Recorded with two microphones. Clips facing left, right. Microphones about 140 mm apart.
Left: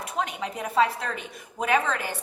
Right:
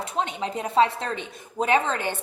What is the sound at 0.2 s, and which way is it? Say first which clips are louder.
Speech: right 2 dB; 30° right (ahead or behind).